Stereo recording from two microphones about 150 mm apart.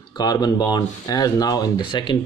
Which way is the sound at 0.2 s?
25° left (ahead or behind).